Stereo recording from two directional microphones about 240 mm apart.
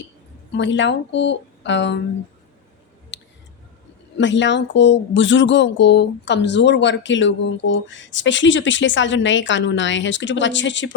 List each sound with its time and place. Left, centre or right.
0.5 s speech: left
3.1 s a sound: left
4.2 s speech: left